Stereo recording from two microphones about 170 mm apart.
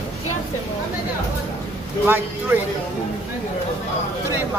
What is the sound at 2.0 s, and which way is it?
Speech, 10° right (ahead or behind).